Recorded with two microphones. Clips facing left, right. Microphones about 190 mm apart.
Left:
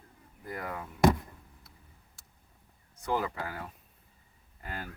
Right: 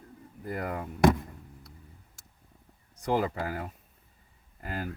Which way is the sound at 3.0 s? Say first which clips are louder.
Right 4 dB; 40° right (ahead or behind).